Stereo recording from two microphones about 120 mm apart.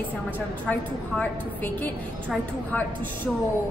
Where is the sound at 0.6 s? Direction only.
10° left (ahead or behind).